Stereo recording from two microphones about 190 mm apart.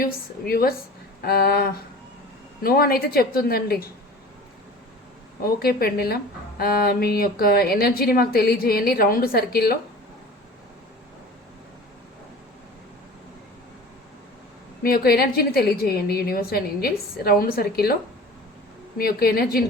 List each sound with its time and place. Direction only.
0.0 s speech: 50° left (ahead or behind)
1.2 s a sound: 55° left (ahead or behind)
2.6 s speech: 50° left (ahead or behind)
5.4 s speech: 50° left (ahead or behind)
14.8 s speech: 55° left (ahead or behind)
18.9 s speech: 55° left (ahead or behind)